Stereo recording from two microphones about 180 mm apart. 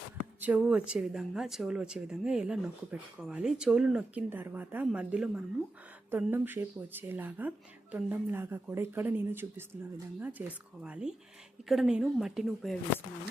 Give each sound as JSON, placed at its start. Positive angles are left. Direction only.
{"t": 0.3, "sound": "speech", "side_deg": -10}